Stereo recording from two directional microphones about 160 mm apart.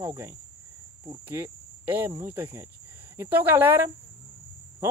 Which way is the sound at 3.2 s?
10° right (ahead or behind).